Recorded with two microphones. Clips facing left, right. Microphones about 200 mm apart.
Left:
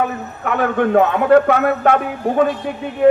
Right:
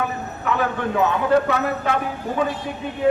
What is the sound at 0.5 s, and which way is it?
Speech, 60° left (ahead or behind).